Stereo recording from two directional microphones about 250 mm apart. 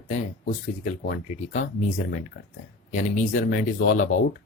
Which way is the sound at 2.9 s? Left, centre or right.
Left.